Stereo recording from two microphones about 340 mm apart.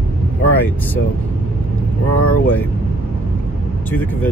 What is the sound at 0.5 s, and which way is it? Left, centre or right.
Speech, centre.